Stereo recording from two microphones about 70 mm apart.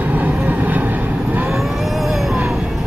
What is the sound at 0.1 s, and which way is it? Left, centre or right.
Vehicle, right.